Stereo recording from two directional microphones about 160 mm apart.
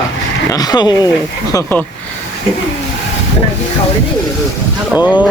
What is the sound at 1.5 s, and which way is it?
Speech, 10° left (ahead or behind).